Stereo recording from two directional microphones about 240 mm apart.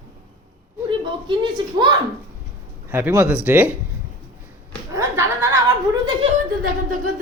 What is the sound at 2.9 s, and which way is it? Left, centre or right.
Speech, centre.